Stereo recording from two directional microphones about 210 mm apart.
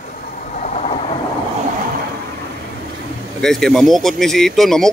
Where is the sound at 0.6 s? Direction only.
30° left (ahead or behind).